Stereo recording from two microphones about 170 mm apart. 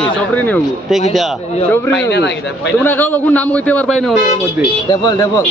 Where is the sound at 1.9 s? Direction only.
90° left.